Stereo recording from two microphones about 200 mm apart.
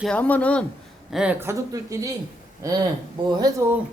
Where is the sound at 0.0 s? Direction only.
5° left (ahead or behind).